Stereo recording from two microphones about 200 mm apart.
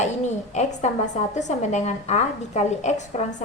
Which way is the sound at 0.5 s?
35° left (ahead or behind).